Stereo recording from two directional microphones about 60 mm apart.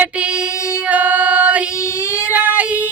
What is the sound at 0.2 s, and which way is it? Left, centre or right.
Female singing, centre.